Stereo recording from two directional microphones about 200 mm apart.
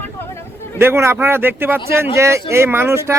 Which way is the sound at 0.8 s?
10° right (ahead or behind).